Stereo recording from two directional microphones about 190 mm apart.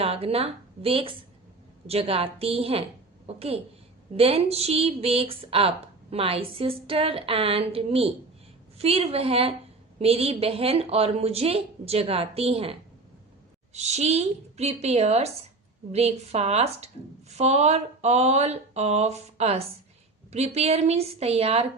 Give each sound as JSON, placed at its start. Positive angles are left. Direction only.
{"t": 0.0, "sound": "speech", "side_deg": -30}
{"t": 13.7, "sound": "speech", "side_deg": -35}